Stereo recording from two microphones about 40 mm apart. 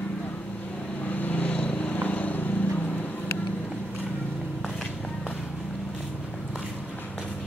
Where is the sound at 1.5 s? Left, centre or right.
Left.